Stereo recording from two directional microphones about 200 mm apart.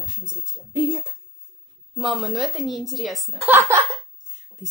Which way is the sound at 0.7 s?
25° left (ahead or behind).